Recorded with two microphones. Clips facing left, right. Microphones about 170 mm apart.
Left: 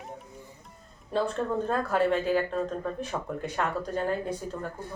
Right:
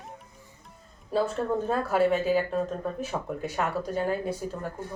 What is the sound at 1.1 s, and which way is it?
Speech, 5° right (ahead or behind).